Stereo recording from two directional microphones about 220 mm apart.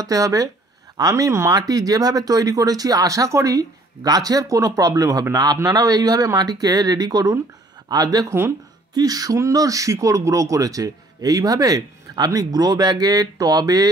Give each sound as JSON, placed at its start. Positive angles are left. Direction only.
{"t": 0.0, "sound": "speech", "side_deg": -15}